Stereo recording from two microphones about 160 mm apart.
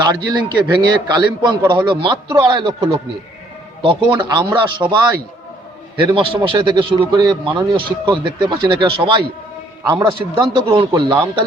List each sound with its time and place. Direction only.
0.0 s a man's voice: 25° right (ahead or behind)